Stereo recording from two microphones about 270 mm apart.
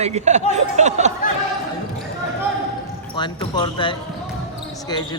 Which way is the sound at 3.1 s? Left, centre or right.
Centre.